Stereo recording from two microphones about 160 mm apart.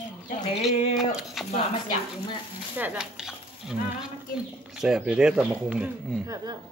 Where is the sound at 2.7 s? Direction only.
10° right (ahead or behind).